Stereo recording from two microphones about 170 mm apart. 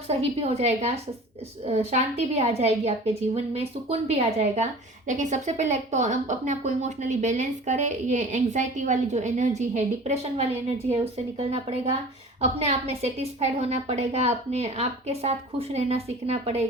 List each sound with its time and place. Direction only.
0.4 s a woman's voice: 40° right (ahead or behind)